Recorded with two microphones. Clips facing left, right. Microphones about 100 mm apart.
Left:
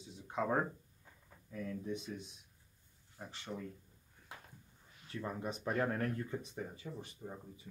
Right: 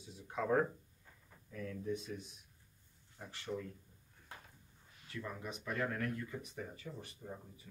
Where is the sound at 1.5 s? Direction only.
15° left (ahead or behind).